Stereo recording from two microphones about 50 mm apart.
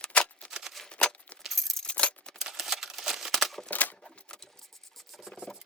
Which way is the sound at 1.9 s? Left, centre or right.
Left.